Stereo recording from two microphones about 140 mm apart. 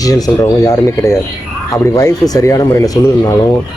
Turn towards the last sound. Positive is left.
turn(degrees=25)  # may be behind; listen again after turning